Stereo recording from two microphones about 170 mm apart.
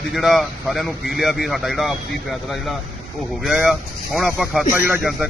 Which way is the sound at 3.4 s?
Centre (ahead or behind).